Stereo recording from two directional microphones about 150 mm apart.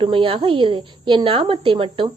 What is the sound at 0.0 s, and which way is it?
A woman's voice, 35° right (ahead or behind).